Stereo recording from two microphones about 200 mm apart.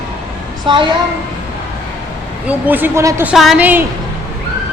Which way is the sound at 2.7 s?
10° right (ahead or behind).